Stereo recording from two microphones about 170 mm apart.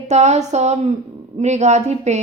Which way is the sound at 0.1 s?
40° right (ahead or behind).